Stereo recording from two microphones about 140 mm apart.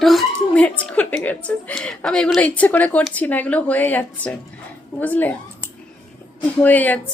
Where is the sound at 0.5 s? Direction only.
10° left (ahead or behind).